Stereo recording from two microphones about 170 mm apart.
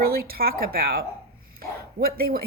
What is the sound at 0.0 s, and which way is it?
Speech, 60° right (ahead or behind).